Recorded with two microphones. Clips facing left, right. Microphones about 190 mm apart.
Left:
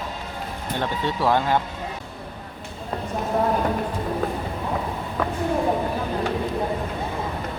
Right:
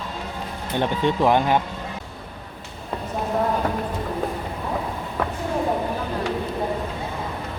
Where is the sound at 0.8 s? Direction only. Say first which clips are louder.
Right 5 dB; 20° right (ahead or behind).